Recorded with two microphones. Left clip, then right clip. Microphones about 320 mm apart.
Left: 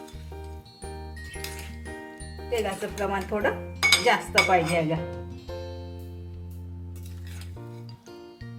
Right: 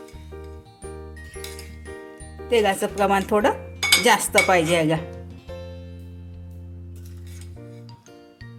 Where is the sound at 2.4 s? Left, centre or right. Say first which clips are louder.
Right 9 dB; right.